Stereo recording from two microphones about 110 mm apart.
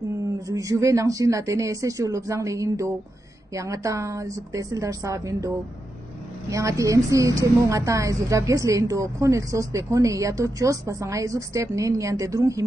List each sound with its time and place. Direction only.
0.5 s a woman's voice: 30° right (ahead or behind)
6.5 s a woman's voice: 30° right (ahead or behind)